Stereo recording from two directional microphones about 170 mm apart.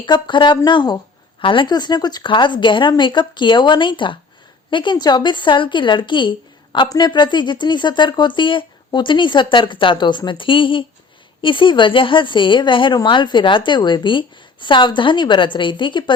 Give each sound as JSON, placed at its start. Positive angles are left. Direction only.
{"t": 0.0, "sound": "speech", "side_deg": 30}